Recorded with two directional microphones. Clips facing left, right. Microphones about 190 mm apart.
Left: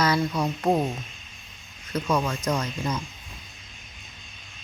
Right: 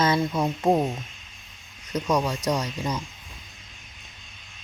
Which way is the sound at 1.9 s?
15° right (ahead or behind).